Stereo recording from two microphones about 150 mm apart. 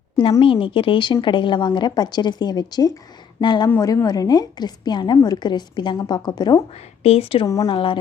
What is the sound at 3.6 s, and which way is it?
A woman's voice, 20° left (ahead or behind).